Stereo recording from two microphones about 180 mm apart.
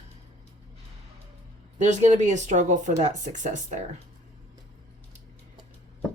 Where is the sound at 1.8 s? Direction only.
40° right (ahead or behind).